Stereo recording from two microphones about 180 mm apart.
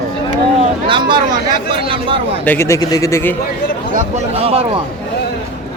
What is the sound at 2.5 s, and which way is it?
Speech, 15° left (ahead or behind).